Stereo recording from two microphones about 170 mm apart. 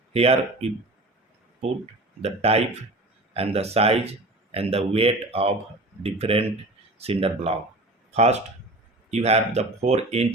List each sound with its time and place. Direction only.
0.1 s speech: 35° right (ahead or behind)
2.2 s speech: 35° right (ahead or behind)